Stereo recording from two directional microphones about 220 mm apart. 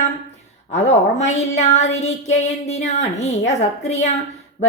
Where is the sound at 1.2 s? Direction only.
30° left (ahead or behind).